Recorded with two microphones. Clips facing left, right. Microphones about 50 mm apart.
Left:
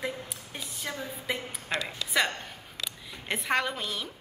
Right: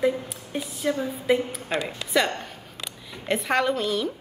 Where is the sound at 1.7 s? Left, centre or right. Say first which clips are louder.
Right 2 dB; right.